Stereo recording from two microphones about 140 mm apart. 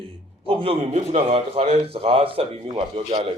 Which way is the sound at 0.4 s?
45° right (ahead or behind).